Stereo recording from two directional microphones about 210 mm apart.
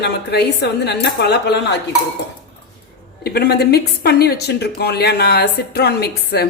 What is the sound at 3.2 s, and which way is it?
A woman's voice, 50° left (ahead or behind).